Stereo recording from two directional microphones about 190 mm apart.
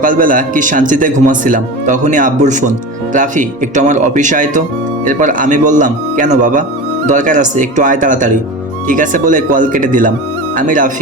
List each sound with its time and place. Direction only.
0.0 s speech: 45° right (ahead or behind)